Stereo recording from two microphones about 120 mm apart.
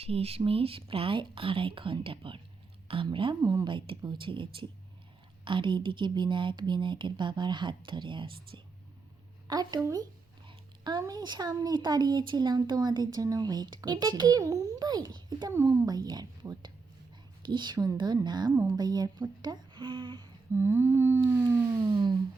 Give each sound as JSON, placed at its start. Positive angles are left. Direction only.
{"t": 0.0, "sound": "speech", "side_deg": -55}
{"t": 3.4, "sound": "a woman's voice", "side_deg": -30}
{"t": 3.7, "sound": "speech", "side_deg": -45}
{"t": 9.5, "sound": "speech", "side_deg": -30}
{"t": 15.5, "sound": "a woman's voice", "side_deg": -20}
{"t": 15.9, "sound": "a woman's voice", "side_deg": -35}
{"t": 20.5, "sound": "humming", "side_deg": -20}
{"t": 21.2, "sound": "siren", "side_deg": -20}
{"t": 21.8, "sound": "a sound", "side_deg": -40}